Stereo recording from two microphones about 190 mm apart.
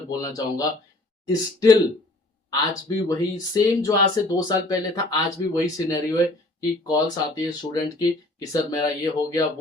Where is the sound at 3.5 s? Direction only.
20° left (ahead or behind).